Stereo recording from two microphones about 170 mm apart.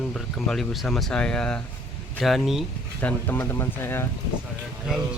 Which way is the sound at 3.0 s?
15° left (ahead or behind).